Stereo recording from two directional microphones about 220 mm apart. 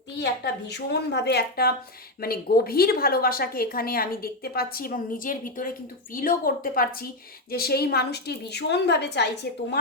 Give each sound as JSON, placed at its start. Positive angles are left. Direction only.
{"t": 0.2, "sound": "a woman's voice", "side_deg": 50}